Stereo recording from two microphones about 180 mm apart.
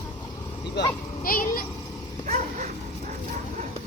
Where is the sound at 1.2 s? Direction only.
50° left (ahead or behind).